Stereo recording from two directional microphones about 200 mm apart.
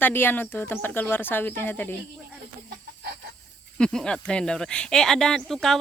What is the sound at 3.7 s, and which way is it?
Speech, 5° left (ahead or behind).